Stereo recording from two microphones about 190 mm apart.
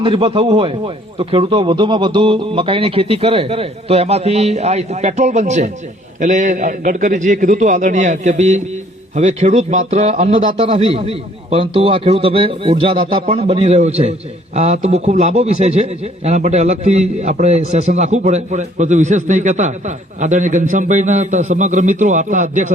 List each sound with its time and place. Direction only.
0.0 s a man's voice: 30° right (ahead or behind)